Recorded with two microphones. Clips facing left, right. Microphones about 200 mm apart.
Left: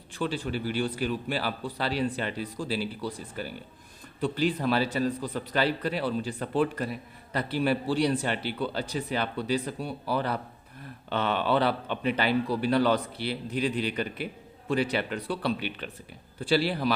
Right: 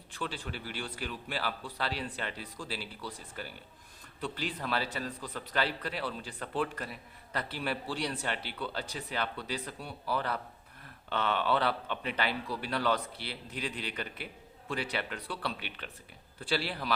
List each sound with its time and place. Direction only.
0.1 s a man's voice: 15° left (ahead or behind)